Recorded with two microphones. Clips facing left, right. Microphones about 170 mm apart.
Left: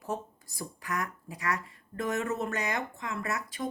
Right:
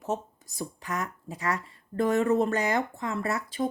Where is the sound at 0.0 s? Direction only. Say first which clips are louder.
Right 4 dB; 25° right (ahead or behind).